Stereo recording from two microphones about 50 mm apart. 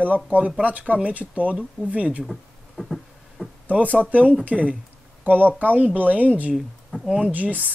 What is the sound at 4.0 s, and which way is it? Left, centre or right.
A woman's voice, right.